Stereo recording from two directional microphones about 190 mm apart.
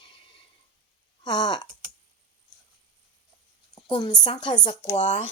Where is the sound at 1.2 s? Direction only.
20° left (ahead or behind).